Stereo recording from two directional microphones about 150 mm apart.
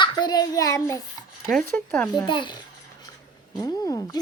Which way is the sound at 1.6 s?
15° left (ahead or behind).